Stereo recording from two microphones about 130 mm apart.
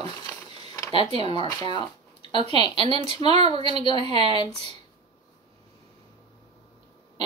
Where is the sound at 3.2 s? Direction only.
50° right (ahead or behind).